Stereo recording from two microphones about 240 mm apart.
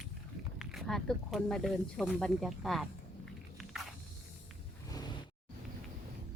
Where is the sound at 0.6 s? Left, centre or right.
Centre.